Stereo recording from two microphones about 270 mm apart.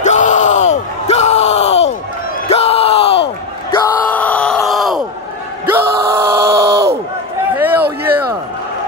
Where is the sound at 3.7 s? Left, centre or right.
Centre.